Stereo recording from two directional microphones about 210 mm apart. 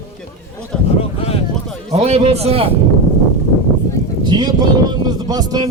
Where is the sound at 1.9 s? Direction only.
30° right (ahead or behind).